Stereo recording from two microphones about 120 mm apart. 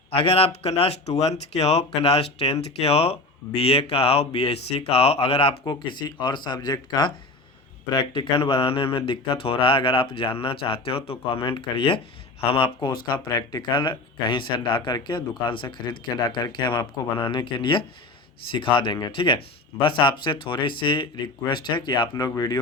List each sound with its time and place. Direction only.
0.1 s speech: 50° left (ahead or behind)
5.6 s speech: 40° left (ahead or behind)